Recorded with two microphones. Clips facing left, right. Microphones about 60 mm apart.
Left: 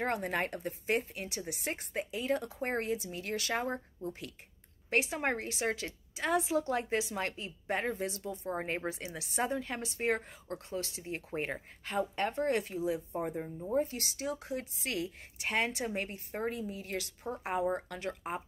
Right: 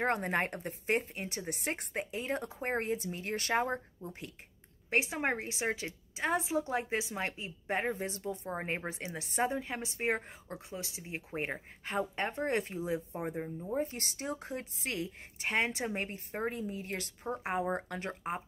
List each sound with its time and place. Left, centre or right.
0.0 s a woman's voice: right
8.1 s a woman's voice: right; by 11.6 s centre
11.8 s a woman's voice: right
13.2 s speech: centre
13.7 s a woman's voice: right